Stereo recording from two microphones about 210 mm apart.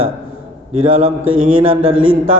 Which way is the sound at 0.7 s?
75° right (ahead or behind).